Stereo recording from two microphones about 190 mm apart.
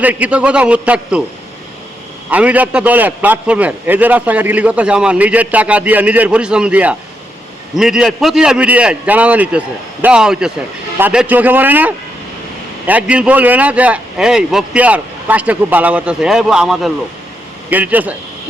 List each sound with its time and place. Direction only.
0.0 s a man's voice: 10° right (ahead or behind)
2.3 s a man's voice: 10° right (ahead or behind)